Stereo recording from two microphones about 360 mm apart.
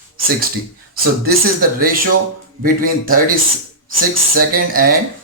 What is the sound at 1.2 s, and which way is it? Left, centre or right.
Speech, right.